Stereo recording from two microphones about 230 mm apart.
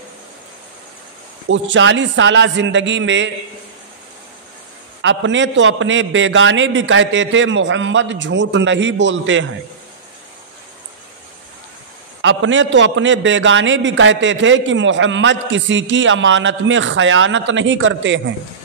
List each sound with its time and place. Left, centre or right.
1.5 s a man's voice: right
5.0 s a man's voice: right
12.2 s a man's voice: right